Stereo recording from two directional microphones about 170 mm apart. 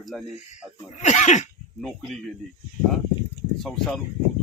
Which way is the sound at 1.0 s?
45° left (ahead or behind).